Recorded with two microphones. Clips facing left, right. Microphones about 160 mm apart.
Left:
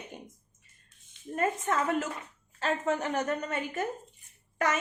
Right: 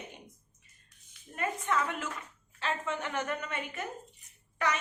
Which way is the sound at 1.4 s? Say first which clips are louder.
Left 3 dB; 40° left (ahead or behind).